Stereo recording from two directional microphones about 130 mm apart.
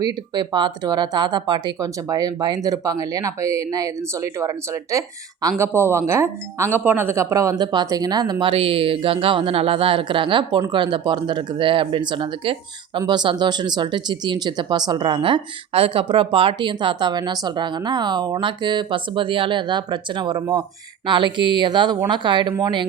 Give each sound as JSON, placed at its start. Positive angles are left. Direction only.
{"t": 0.0, "sound": "speech", "side_deg": -35}
{"t": 7.6, "sound": "speech", "side_deg": -35}